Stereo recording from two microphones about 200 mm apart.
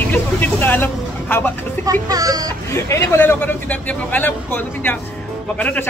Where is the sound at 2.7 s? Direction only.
15° left (ahead or behind).